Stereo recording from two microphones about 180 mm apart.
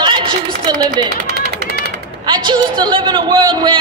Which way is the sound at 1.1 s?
65° right (ahead or behind).